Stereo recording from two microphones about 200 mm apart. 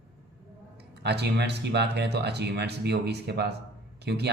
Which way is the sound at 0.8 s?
55° right (ahead or behind).